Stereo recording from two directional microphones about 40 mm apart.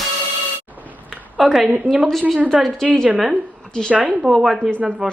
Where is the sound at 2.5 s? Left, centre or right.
Centre.